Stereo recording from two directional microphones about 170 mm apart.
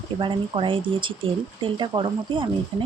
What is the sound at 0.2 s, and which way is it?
Speech, 30° right (ahead or behind).